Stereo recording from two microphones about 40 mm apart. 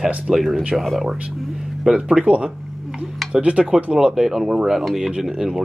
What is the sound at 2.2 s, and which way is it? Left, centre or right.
Speech, right.